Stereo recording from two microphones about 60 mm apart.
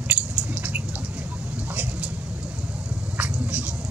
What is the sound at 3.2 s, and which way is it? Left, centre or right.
Drip, right.